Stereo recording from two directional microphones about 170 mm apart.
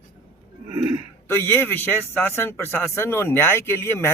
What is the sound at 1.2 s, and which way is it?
Speech, 15° left (ahead or behind).